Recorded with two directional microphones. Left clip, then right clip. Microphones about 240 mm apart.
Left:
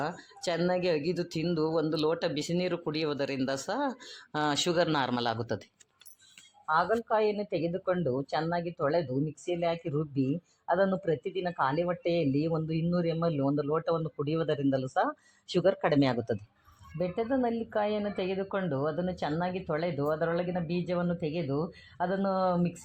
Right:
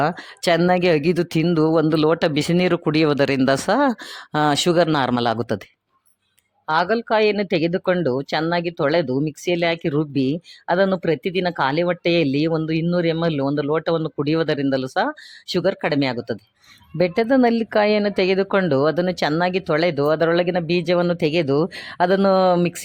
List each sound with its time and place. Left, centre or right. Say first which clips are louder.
0.0 s speech: right 13 dB; right
6.7 s speech: right 8 dB; right
17.0 s speech: right 13 dB; right